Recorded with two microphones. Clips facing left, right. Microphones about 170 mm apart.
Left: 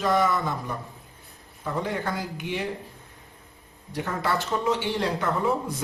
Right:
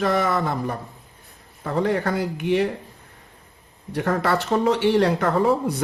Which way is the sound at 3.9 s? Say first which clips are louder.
Right 6 dB; 65° right (ahead or behind).